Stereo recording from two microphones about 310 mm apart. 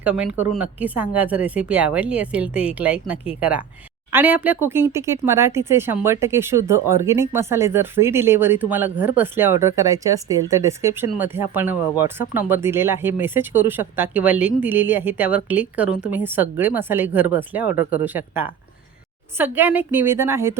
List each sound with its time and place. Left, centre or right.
0.0 s speech: centre